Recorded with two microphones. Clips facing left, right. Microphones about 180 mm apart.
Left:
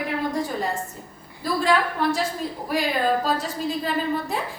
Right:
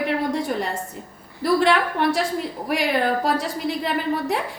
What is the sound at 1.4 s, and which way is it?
A woman's voice, 80° right.